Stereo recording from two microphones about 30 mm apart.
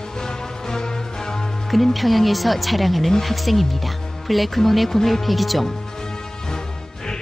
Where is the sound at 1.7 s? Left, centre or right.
Centre.